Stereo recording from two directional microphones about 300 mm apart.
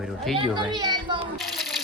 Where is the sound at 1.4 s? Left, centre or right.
Centre.